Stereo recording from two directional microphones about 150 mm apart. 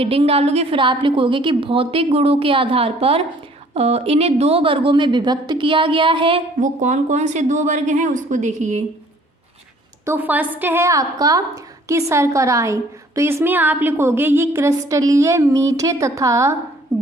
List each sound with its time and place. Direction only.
0.0 s a woman's voice: 40° right (ahead or behind)
6.6 s speech: 55° right (ahead or behind)
10.1 s a woman's voice: 10° right (ahead or behind)